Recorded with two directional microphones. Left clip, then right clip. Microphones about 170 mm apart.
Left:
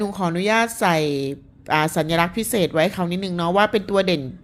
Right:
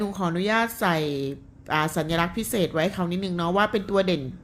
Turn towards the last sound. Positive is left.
turn(degrees=35)  # may be behind; listen again after turning